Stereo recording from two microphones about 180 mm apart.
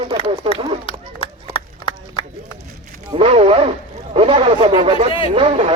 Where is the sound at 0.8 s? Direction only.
30° left (ahead or behind).